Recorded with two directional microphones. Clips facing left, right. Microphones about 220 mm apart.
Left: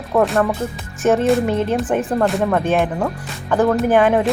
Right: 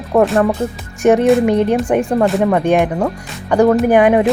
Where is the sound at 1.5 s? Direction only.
15° right (ahead or behind).